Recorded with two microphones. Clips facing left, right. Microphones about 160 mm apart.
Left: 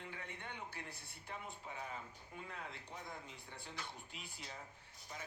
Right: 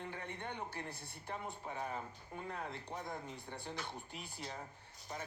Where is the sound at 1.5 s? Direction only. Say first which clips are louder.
Right 6 dB; 50° right (ahead or behind).